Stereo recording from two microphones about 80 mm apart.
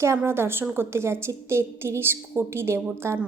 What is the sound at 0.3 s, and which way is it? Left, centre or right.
A woman's voice, right.